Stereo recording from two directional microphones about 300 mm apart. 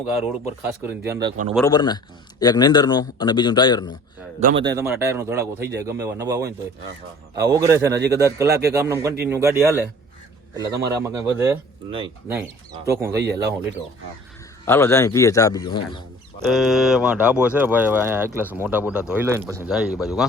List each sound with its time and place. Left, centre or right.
0.1 s speech: centre
1.5 s a man's voice: centre
4.6 s speech: centre
10.8 s speech: centre
13.2 s speech: right
14.6 s a man's voice: centre
16.5 s speech: centre